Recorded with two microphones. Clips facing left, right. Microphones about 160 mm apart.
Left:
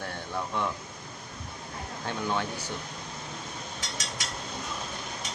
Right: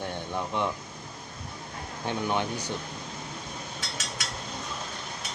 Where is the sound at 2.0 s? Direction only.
20° right (ahead or behind).